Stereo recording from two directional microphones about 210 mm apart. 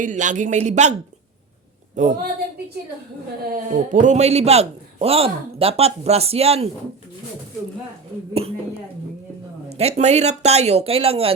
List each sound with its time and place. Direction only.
0.0 s speech: 35° right (ahead or behind)
2.0 s speech: 35° right (ahead or behind)
3.5 s a man's voice: 35° right (ahead or behind)
8.3 s a man's voice: 30° right (ahead or behind)
9.6 s speech: 30° right (ahead or behind)